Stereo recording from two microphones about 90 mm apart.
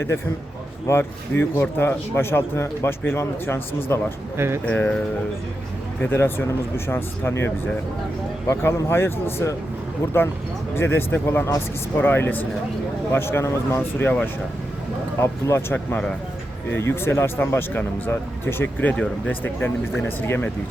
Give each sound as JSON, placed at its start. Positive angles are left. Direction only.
{"t": 0.9, "sound": "speech", "side_deg": 25}
{"t": 4.4, "sound": "speech", "side_deg": -30}
{"t": 4.6, "sound": "speech", "side_deg": 15}
{"t": 6.0, "sound": "speech", "side_deg": 25}
{"t": 10.8, "sound": "speech", "side_deg": 25}
{"t": 13.7, "sound": "speech", "side_deg": 15}
{"t": 15.2, "sound": "speech", "side_deg": 30}